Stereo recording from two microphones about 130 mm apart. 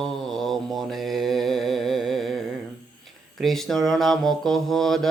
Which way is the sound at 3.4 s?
Centre (ahead or behind).